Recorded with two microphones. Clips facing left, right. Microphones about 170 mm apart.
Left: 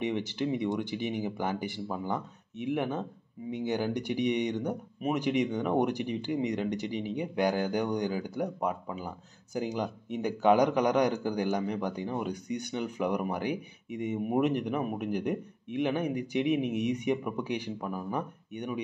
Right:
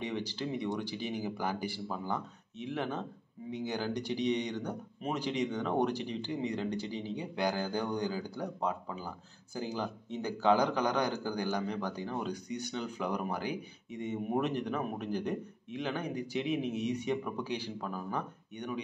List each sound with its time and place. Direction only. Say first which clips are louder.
0.0 s speech: left 5 dB; 20° left (ahead or behind)